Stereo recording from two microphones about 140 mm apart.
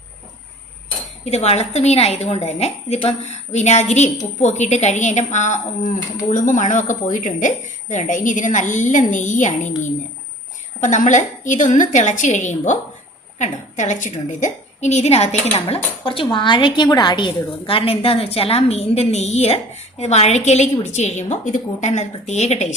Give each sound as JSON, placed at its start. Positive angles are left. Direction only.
{"t": 1.2, "sound": "a woman's voice", "side_deg": 50}